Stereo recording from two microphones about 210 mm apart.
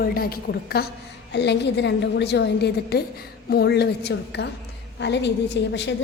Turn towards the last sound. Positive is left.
turn(degrees=55)  # may be behind; listen again after turning